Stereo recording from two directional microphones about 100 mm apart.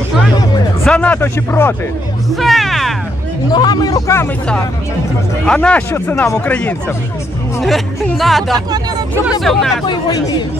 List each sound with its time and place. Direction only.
0.8 s speech: 15° left (ahead or behind)
2.3 s speech: centre (ahead or behind)
3.5 s speech: 45° left (ahead or behind)
5.5 s speech: 10° left (ahead or behind)
7.6 s speech: centre (ahead or behind)
9.8 s speech: 45° left (ahead or behind)